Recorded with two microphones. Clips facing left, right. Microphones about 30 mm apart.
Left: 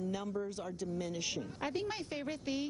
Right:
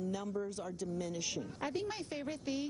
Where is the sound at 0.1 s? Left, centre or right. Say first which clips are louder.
Even; centre.